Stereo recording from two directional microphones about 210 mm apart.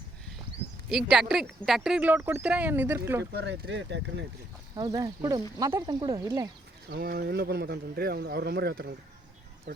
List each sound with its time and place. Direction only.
0.9 s speech: centre (ahead or behind)
3.3 s speech: 55° right (ahead or behind)
4.7 s speech: 15° right (ahead or behind)
6.9 s speech: 45° right (ahead or behind)